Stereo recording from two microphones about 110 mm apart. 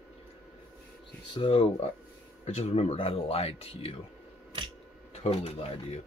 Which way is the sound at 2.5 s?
85° left.